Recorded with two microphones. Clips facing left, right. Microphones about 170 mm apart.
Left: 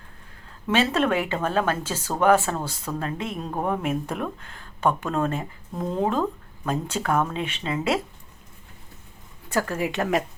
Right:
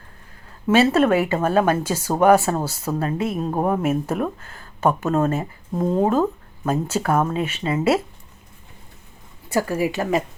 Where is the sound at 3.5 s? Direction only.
35° right (ahead or behind).